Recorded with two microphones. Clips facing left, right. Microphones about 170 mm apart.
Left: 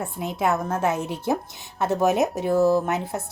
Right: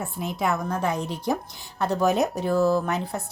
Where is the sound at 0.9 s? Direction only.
5° left (ahead or behind).